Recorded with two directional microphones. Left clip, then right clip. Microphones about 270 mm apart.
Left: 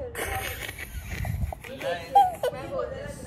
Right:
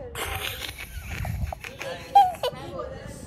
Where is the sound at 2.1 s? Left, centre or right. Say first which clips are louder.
Right 2 dB; centre.